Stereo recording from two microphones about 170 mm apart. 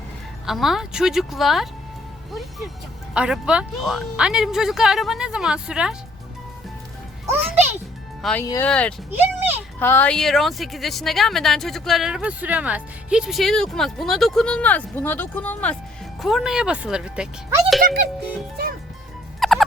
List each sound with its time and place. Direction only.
0.4 s speech: centre (ahead or behind)
3.2 s speech: 5° right (ahead or behind)
7.3 s music: 10° right (ahead or behind)
8.2 s speech: 5° left (ahead or behind)
9.1 s a child's voice: 10° right (ahead or behind)
9.8 s speech: 10° left (ahead or behind); by 17.2 s 5° right (ahead or behind)
17.8 s speech: 60° right (ahead or behind)
19.4 s turkey: centre (ahead or behind)